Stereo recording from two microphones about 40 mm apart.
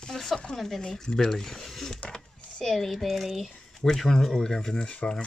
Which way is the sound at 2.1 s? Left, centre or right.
Centre.